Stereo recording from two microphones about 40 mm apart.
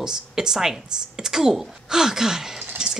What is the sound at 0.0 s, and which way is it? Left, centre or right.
A woman's voice, centre.